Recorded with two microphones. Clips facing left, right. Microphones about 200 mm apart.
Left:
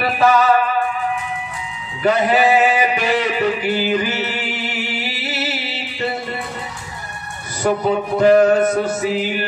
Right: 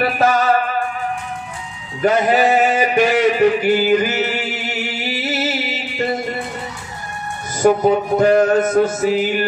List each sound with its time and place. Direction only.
0.2 s music: 45° right (ahead or behind)
2.0 s a sound: 40° right (ahead or behind)
5.1 s music: 45° right (ahead or behind)
7.6 s music: 45° right (ahead or behind)